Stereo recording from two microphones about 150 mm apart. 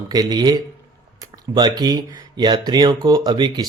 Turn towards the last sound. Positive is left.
turn(degrees=-30)  # may be behind; listen again after turning